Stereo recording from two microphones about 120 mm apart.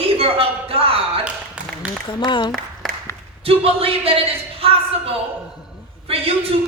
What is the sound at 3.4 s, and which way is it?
Speech, 50° right (ahead or behind).